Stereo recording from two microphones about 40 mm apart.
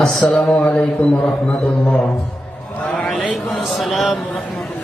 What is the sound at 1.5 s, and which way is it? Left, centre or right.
Music, left.